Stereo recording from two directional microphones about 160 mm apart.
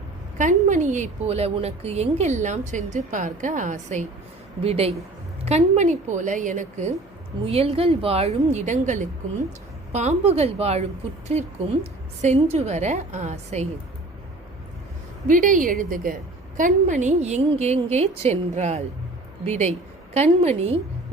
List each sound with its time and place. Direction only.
0.3 s a woman's voice: 50° right (ahead or behind)
4.6 s a woman's voice: 40° right (ahead or behind)
7.4 s a woman's voice: 35° right (ahead or behind)
15.3 s a woman's voice: 55° right (ahead or behind)